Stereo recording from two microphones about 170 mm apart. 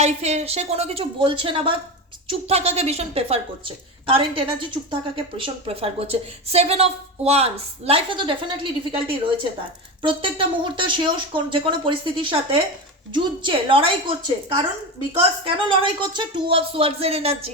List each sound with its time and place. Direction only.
0.0 s a woman's voice: 40° right (ahead or behind)
15.4 s a woman's voice: 30° right (ahead or behind)